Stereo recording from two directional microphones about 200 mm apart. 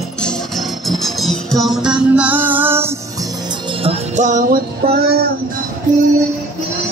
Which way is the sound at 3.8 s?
35° right (ahead or behind).